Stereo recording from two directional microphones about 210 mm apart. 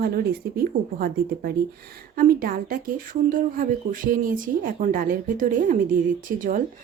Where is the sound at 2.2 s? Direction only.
45° right (ahead or behind).